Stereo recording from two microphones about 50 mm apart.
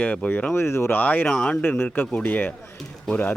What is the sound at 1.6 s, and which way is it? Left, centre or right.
Speech, left.